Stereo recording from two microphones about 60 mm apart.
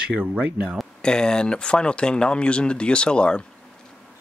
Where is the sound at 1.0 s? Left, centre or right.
Centre.